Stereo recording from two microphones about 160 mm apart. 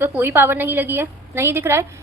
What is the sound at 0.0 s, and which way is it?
A woman's voice, 10° right (ahead or behind).